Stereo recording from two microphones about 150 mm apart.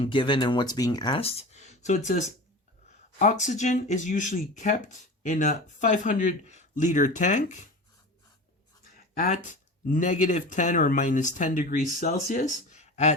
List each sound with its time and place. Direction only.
0.0 s speech: 35° left (ahead or behind); by 7.7 s 55° left (ahead or behind)
9.1 s speech: 55° left (ahead or behind)